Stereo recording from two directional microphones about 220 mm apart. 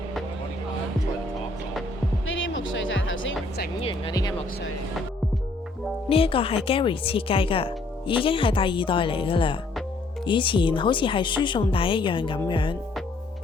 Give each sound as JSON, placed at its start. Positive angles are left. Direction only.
{"t": 2.2, "sound": "music", "side_deg": 60}
{"t": 3.8, "sound": "speech", "side_deg": 25}
{"t": 6.1, "sound": "speech", "side_deg": 25}